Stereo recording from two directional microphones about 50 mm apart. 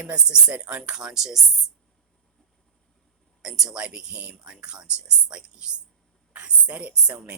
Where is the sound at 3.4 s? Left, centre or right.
Centre.